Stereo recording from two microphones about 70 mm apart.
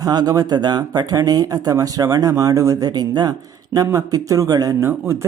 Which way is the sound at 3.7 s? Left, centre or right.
Right.